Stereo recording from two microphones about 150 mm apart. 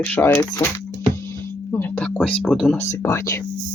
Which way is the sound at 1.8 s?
10° left (ahead or behind).